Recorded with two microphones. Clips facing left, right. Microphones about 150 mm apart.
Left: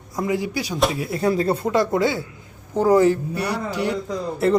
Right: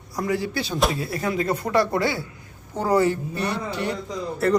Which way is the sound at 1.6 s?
20° left (ahead or behind).